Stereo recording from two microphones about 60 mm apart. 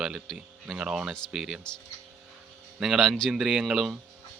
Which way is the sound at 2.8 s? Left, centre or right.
Centre.